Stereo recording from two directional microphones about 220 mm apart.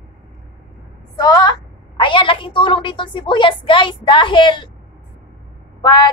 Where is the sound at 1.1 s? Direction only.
20° left (ahead or behind).